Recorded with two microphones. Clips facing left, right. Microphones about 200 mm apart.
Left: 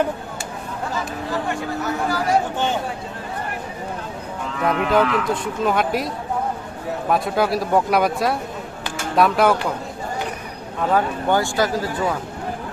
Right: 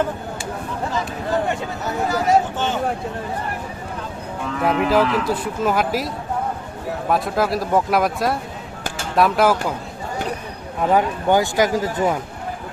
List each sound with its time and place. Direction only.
2.0 s speech: 25° right (ahead or behind)
4.6 s a man's voice: 5° right (ahead or behind)
7.1 s a man's voice: centre (ahead or behind)
10.9 s speech: 15° right (ahead or behind)